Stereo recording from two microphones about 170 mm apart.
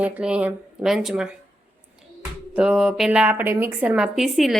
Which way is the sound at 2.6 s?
5° right (ahead or behind).